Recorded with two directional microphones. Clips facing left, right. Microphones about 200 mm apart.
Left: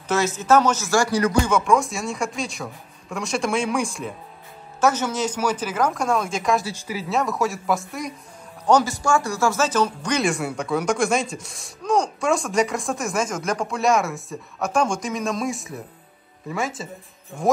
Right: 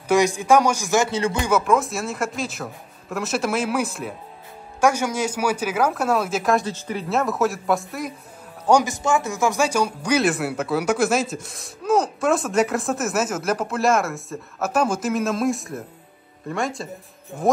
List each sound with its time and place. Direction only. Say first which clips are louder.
0.1 s speech: right 2 dB; 15° right (ahead or behind)
1.5 s speech: even; 5° right (ahead or behind)
6.6 s speech: right 2 dB; 10° left (ahead or behind)